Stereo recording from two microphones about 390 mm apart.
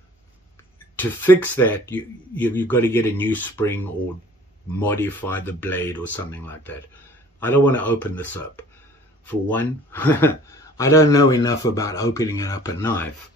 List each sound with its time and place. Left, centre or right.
0.9 s a man's voice: centre